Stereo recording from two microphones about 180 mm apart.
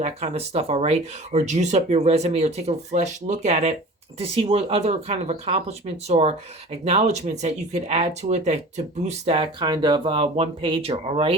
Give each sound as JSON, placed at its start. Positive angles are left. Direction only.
{"t": 0.0, "sound": "speech", "side_deg": -35}